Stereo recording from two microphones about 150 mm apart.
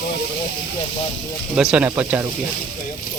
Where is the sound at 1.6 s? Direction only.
5° right (ahead or behind).